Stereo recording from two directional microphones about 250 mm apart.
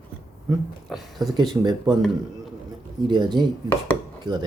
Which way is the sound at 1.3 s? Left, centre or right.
Centre.